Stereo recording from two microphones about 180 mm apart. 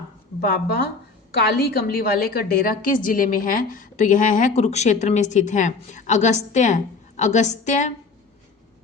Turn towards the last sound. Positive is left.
turn(degrees=40)  # may be behind; listen again after turning